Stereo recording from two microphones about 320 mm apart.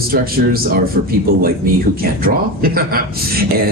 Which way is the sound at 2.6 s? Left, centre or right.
Right.